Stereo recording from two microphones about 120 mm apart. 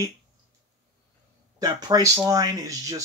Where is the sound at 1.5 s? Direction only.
35° right (ahead or behind).